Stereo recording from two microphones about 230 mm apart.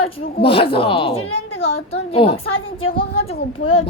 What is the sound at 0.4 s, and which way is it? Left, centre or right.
A woman's voice, left.